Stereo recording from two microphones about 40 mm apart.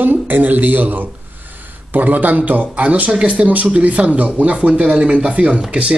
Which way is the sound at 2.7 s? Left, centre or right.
Right.